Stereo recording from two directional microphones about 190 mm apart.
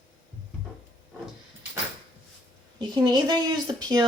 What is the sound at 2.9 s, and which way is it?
Speech, 20° right (ahead or behind).